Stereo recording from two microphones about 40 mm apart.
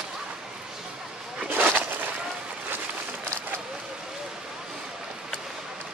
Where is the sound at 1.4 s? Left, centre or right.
Right.